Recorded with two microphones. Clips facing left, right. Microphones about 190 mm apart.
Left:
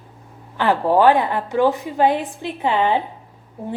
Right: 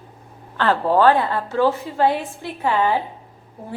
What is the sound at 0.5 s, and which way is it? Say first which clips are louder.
A woman's voice: left 1 dB; 15° left (ahead or behind).